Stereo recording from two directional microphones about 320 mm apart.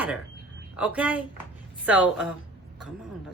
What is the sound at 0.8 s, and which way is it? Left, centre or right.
Speech, centre.